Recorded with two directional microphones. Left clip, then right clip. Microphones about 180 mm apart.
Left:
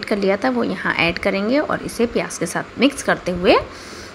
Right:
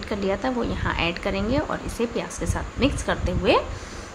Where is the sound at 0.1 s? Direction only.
30° left (ahead or behind).